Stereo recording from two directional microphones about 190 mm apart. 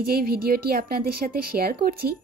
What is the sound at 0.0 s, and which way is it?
A woman's voice, 50° right (ahead or behind).